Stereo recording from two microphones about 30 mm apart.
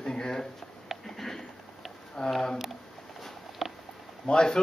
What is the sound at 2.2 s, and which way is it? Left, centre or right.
Speech, centre.